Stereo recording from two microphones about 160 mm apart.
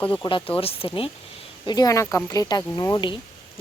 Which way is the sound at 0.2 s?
30° left (ahead or behind).